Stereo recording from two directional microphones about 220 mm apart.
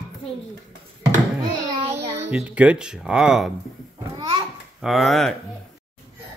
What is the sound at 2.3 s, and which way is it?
Speech, 5° right (ahead or behind).